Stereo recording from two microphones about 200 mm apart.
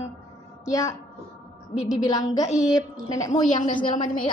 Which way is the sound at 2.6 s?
5° right (ahead or behind).